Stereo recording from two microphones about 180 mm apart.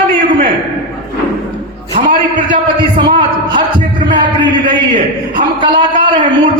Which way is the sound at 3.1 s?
25° right (ahead or behind).